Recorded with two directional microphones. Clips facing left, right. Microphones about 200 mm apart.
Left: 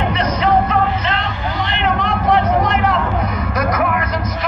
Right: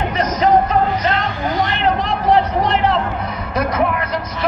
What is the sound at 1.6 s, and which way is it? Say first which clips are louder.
Vehicle: right 1 dB; 40° right (ahead or behind).